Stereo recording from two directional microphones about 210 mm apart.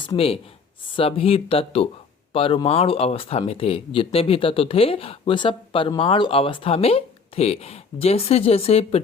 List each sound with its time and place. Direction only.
0.0 s speech: 25° left (ahead or behind)